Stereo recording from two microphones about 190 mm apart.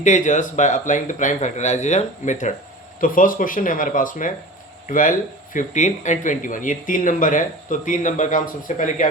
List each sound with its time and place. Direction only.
0.0 s a man's voice: 40° left (ahead or behind)